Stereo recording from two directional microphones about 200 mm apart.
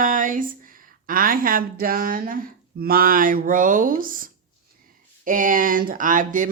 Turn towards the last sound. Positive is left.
turn(degrees=-40)  # may be behind; listen again after turning